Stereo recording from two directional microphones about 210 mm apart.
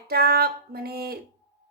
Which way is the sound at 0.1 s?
45° right (ahead or behind).